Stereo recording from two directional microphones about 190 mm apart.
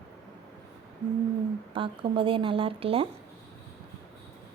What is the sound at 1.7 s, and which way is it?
Speech, 25° right (ahead or behind).